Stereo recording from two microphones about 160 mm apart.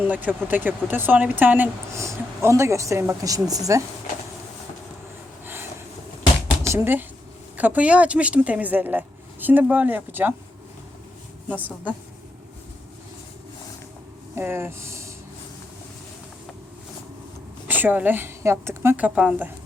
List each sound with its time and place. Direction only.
0.1 s speech: 10° right (ahead or behind)
6.7 s speech: 15° right (ahead or behind)
11.4 s speech: 10° right (ahead or behind)
14.3 s speech: 15° right (ahead or behind)
17.7 s speech: 10° right (ahead or behind)